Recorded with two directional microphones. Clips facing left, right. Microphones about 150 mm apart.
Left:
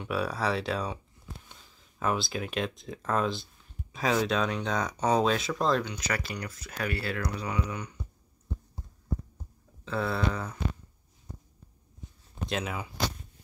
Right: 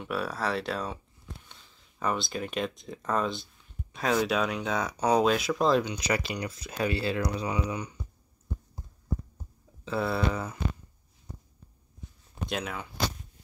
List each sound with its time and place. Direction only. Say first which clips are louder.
0.0 s speech: left 1 dB; centre (ahead or behind)
5.8 s speech: right 4 dB; 15° right (ahead or behind)
9.8 s speech: right 1 dB; 5° right (ahead or behind)
12.4 s speech: left 1 dB; centre (ahead or behind)